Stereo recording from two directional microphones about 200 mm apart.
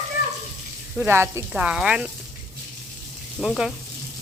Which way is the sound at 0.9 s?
10° right (ahead or behind).